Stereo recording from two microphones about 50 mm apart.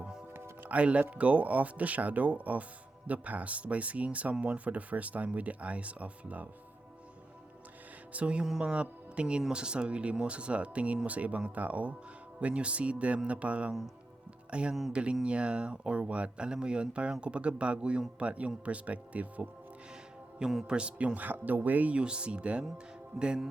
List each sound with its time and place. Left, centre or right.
0.7 s speech: right
8.1 s speech: right
20.4 s a man's voice: centre
20.7 s speech: right
22.0 s speech: right